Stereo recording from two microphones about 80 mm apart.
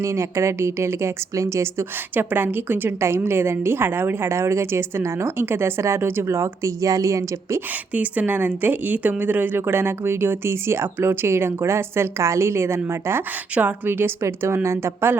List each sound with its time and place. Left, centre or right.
0.0 s a woman's voice: right
2.1 s a woman's voice: right
7.9 s speech: centre